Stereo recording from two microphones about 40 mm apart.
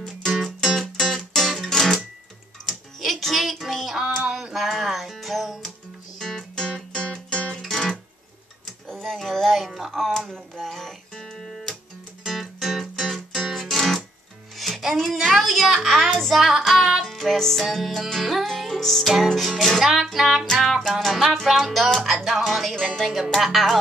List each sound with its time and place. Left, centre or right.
0.7 s music: centre
3.0 s child singing: centre
4.3 s music: centre
6.1 s music: centre
7.5 s music: centre
8.8 s a sound: centre
12.3 s music: centre
15.3 s a sound: centre
16.3 s music: centre
19.8 s music: centre